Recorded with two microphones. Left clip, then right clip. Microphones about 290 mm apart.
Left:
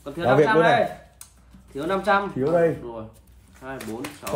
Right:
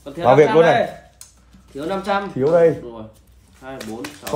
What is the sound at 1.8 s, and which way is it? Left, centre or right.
Speech, centre.